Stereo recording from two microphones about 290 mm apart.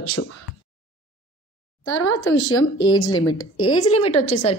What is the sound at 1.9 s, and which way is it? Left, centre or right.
Speech, left.